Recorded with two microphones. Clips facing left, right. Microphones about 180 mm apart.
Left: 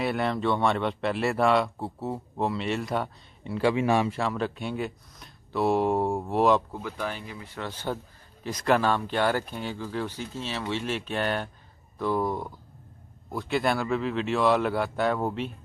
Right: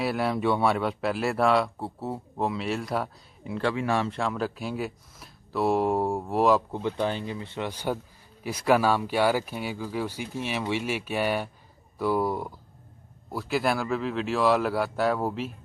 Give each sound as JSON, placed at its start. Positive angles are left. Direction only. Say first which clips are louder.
{"t": 0.0, "sound": "speech", "louder": "right 1 dB", "side_deg": -5}
{"t": 3.6, "sound": "speech", "louder": "left 3 dB", "side_deg": 15}
{"t": 4.1, "sound": "speech", "louder": "even", "side_deg": 0}
{"t": 6.7, "sound": "speech", "louder": "right 5 dB", "side_deg": -25}